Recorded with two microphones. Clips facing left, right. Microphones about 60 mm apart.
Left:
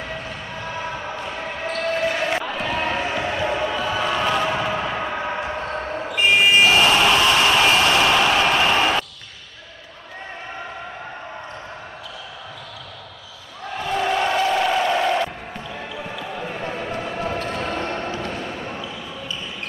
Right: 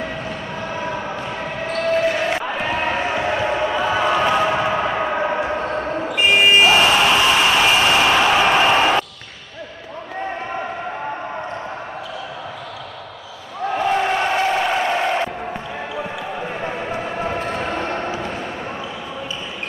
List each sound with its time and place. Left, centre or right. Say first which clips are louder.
0.0 s basketball bounce: right 4 dB; centre
2.4 s basketball bounce: right 2 dB; right
13.7 s a sound: right 4 dB; right; by 18.9 s centre